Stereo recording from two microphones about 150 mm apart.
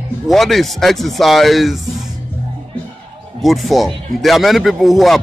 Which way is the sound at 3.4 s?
Centre (ahead or behind).